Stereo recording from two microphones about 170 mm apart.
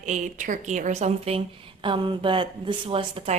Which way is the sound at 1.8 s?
30° right (ahead or behind).